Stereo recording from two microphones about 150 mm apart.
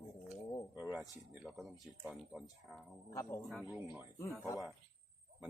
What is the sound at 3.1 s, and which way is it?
Speech, 20° left (ahead or behind).